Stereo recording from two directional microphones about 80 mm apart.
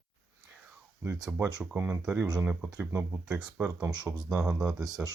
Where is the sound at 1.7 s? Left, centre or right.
Centre.